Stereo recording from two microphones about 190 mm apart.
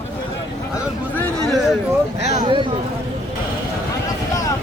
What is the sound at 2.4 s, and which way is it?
Speech, 25° right (ahead or behind).